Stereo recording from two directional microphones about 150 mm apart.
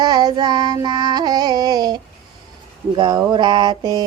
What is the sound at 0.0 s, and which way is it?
Music, 25° right (ahead or behind).